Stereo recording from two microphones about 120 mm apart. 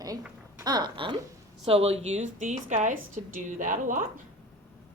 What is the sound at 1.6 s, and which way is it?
A woman's voice, 55° right (ahead or behind).